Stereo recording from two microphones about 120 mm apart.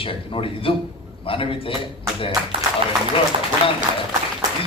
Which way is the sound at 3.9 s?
50° right (ahead or behind).